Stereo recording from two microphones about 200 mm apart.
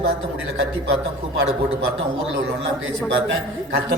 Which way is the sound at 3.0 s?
60° right (ahead or behind).